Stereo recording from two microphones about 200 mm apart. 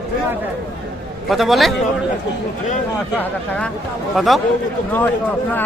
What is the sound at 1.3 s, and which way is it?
Speech, centre (ahead or behind).